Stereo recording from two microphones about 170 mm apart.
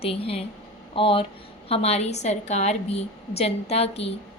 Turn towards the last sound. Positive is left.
turn(degrees=35)  # may be behind; listen again after turning